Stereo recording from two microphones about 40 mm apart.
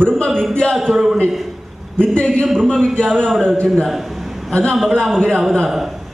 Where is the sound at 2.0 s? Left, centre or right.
Left.